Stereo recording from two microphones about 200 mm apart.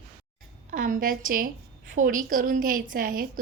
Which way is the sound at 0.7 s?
40° right (ahead or behind).